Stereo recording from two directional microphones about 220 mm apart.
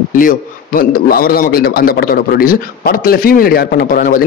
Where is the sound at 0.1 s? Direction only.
40° left (ahead or behind).